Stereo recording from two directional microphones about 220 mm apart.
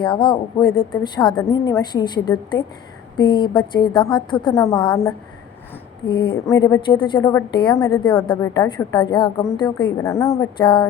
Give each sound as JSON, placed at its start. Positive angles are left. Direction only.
{"t": 0.0, "sound": "a woman's voice", "side_deg": 20}